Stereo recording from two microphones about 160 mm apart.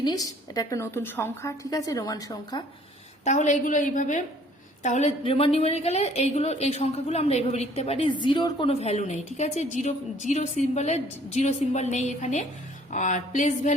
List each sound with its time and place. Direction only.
0.0 s a woman's voice: 25° left (ahead or behind)
3.2 s a woman's voice: 50° left (ahead or behind)